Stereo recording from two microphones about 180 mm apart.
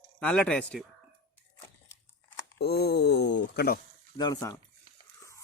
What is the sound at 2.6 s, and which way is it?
Speech, 60° left (ahead or behind).